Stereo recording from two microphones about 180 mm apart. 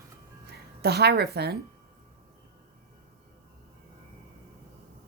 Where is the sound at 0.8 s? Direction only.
65° right (ahead or behind).